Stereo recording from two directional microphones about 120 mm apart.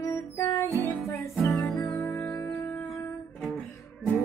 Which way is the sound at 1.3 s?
Centre (ahead or behind).